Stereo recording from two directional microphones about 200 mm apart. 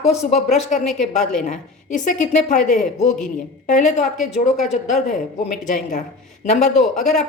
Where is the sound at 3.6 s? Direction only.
35° left (ahead or behind).